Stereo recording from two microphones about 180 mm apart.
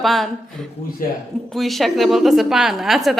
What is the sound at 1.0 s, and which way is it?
Speech, 50° left (ahead or behind).